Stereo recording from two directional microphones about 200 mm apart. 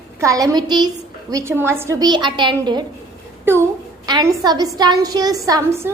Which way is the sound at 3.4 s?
10° right (ahead or behind).